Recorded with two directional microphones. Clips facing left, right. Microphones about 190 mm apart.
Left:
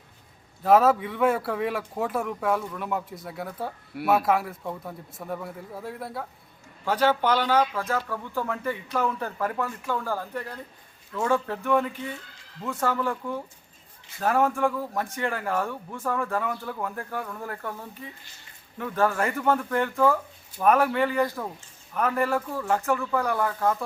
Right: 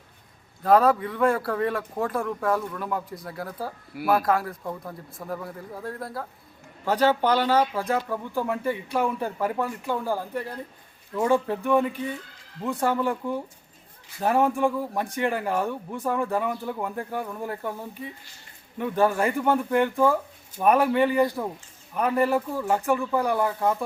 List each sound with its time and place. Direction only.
0.6 s speech: 5° left (ahead or behind)
6.8 s speech: 10° right (ahead or behind)